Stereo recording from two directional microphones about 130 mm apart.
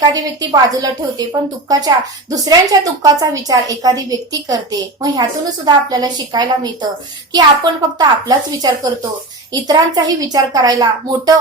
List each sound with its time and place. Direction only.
0.0 s a woman's voice: 30° right (ahead or behind)